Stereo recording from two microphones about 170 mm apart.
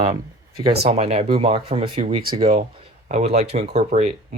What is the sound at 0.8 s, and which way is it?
Speech, 40° right (ahead or behind).